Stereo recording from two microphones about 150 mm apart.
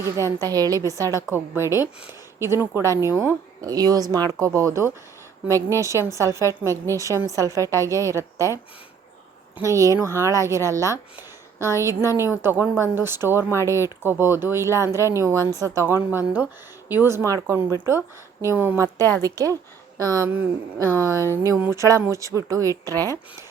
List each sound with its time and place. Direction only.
0.0 s speech: 20° right (ahead or behind)
9.6 s speech: 20° right (ahead or behind)